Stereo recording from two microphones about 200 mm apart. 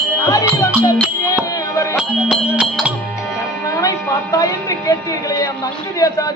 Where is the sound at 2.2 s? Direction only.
5° right (ahead or behind).